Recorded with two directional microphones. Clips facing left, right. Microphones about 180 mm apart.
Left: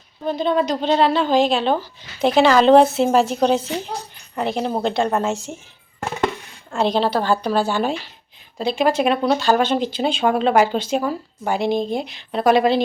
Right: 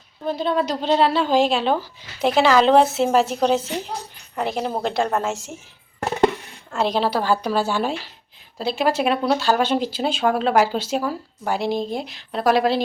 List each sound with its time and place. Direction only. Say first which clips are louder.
0.3 s speech: left 2 dB; 5° right (ahead or behind)
6.1 s a sound: right 4 dB; 40° right (ahead or behind)
6.7 s speech: left 2 dB; 5° right (ahead or behind)